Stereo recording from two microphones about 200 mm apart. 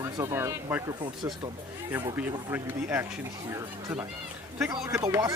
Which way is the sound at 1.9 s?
10° right (ahead or behind).